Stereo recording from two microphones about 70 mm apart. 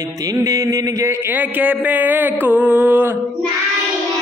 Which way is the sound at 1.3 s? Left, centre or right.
Right.